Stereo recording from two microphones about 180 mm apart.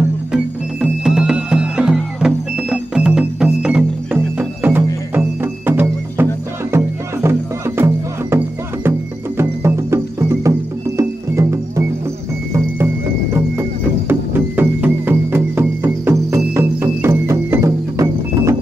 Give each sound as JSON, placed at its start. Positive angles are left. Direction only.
{"t": 0.3, "sound": "music", "side_deg": -5}